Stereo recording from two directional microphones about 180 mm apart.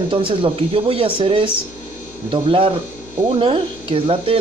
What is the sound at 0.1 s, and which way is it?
Speech, 30° right (ahead or behind).